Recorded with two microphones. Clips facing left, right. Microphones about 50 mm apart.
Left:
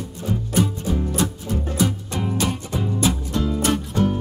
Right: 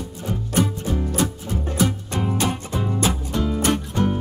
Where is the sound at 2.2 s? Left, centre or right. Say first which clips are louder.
Right 1 dB; right.